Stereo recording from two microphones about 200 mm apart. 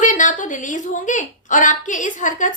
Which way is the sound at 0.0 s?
40° left (ahead or behind).